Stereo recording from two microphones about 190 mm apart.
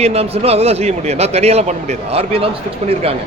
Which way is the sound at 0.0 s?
35° right (ahead or behind).